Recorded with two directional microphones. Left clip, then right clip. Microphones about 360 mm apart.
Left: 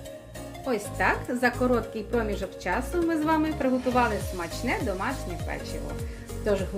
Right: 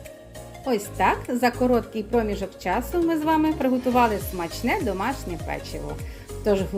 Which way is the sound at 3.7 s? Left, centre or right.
Centre.